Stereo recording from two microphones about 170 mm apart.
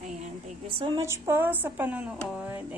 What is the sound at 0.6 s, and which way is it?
Speech, 30° right (ahead or behind).